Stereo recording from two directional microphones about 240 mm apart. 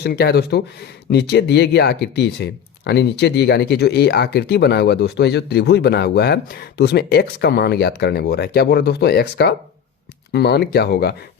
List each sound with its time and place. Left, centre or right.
0.0 s a man's voice: left